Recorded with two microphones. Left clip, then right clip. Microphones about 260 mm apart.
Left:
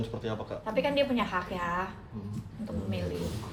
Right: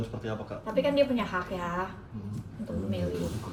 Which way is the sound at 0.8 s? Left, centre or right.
Centre.